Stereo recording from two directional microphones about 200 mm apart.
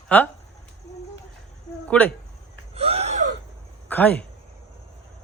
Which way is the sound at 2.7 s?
30° right (ahead or behind).